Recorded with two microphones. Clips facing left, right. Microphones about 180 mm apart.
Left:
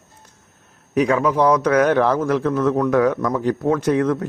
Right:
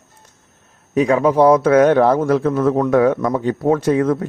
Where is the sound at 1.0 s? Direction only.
25° right (ahead or behind).